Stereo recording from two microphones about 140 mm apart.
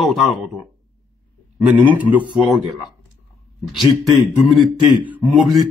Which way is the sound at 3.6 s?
Centre (ahead or behind).